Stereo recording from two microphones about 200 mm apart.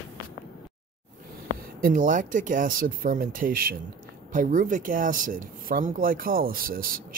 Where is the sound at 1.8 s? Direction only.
45° right (ahead or behind).